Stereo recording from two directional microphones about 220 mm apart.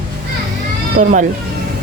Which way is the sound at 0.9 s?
35° right (ahead or behind).